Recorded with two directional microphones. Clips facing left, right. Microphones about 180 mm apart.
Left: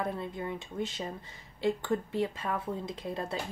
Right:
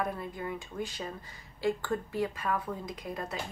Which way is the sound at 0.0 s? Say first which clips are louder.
Even; 25° left (ahead or behind).